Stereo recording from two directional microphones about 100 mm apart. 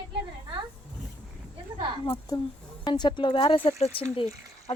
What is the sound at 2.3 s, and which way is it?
Speech, 40° left (ahead or behind).